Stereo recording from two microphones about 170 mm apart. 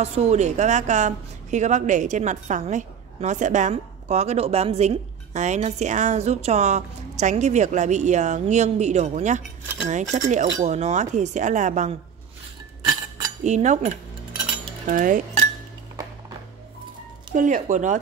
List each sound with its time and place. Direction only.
0.0 s a woman's voice: 40° right (ahead or behind)
13.4 s a woman's voice: 45° right (ahead or behind)
17.3 s a woman's voice: 50° right (ahead or behind)